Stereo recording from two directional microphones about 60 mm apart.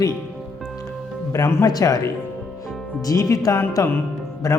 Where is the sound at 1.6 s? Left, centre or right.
Left.